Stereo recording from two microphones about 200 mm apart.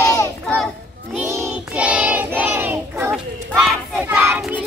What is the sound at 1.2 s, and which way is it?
Child singing, 10° right (ahead or behind).